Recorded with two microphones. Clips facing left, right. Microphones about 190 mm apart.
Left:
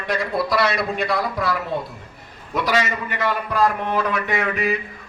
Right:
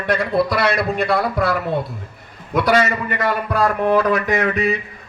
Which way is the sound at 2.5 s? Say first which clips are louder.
Right 5 dB; 55° right (ahead or behind).